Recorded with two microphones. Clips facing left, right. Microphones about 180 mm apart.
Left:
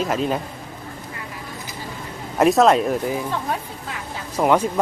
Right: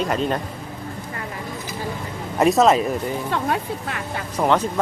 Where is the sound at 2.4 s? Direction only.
Centre (ahead or behind).